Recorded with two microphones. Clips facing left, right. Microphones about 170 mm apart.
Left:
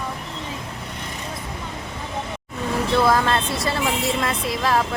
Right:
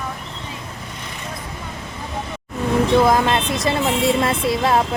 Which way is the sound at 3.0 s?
15° right (ahead or behind).